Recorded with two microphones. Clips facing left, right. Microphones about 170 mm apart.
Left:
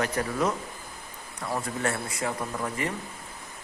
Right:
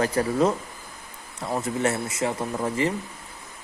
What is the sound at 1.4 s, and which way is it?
Mantra, 20° right (ahead or behind).